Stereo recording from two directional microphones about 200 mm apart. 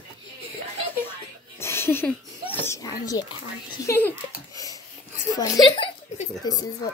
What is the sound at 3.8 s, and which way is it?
Speech, 15° left (ahead or behind).